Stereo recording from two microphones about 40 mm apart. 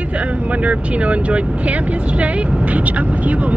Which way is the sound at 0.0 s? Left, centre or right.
Right.